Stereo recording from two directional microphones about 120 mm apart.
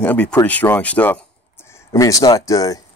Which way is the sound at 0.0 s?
15° left (ahead or behind).